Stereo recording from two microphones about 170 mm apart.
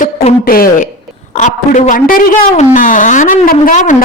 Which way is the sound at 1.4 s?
45° left (ahead or behind).